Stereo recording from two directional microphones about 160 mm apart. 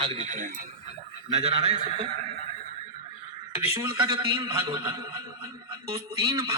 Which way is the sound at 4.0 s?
30° right (ahead or behind).